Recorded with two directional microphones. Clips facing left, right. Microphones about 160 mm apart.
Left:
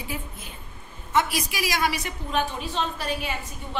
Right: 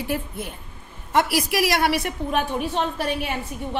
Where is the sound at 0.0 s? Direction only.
65° right (ahead or behind).